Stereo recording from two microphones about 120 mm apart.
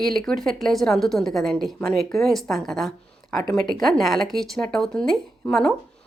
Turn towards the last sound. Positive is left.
turn(degrees=5)  # may be behind; listen again after turning